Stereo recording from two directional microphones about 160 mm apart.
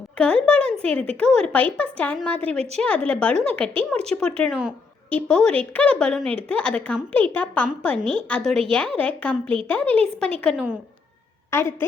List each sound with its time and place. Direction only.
0.2 s a woman's voice: 5° left (ahead or behind)
11.5 s a woman's voice: 15° left (ahead or behind)